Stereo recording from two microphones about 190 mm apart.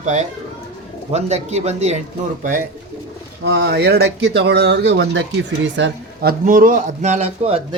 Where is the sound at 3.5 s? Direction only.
60° right (ahead or behind).